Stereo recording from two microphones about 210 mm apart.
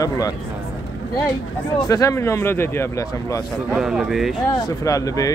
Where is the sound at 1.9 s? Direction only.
15° left (ahead or behind).